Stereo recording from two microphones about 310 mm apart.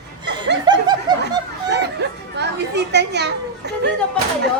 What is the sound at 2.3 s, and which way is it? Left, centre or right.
Chatter, right.